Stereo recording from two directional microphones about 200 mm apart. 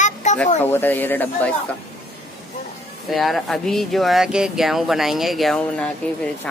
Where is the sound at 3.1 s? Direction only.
Centre (ahead or behind).